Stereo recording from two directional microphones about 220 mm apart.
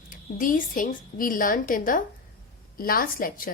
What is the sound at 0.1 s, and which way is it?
Speech, 40° left (ahead or behind).